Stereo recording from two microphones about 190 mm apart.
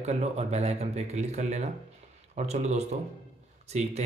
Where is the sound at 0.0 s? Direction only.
35° right (ahead or behind).